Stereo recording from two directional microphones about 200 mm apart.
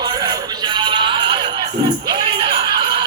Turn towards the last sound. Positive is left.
turn(degrees=-20)  # may be behind; listen again after turning